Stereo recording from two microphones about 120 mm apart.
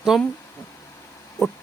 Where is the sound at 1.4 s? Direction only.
25° left (ahead or behind).